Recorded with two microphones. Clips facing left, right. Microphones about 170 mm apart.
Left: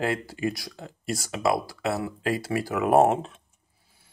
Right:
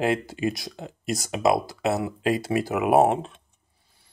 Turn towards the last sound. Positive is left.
turn(degrees=0)  # may be behind; listen again after turning